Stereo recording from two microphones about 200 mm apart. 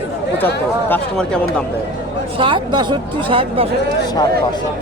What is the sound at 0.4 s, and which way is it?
Speech, 10° left (ahead or behind).